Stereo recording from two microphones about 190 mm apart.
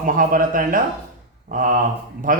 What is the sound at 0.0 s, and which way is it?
A man's voice, 45° right (ahead or behind).